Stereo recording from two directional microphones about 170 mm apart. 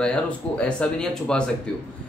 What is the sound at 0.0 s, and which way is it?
A man's voice, 5° left (ahead or behind).